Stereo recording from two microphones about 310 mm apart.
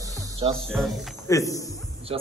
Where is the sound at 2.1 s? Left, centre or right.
Centre.